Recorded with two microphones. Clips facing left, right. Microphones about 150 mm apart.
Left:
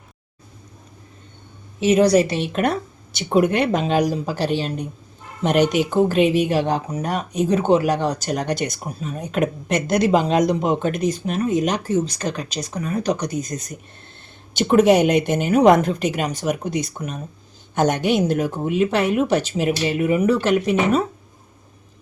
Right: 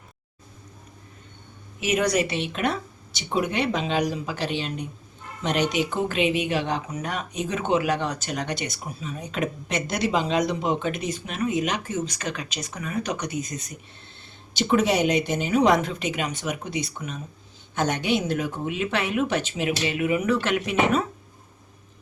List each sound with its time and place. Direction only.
1.8 s speech: 30° left (ahead or behind)